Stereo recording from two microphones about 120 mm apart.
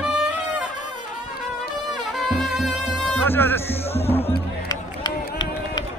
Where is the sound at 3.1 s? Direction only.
15° left (ahead or behind).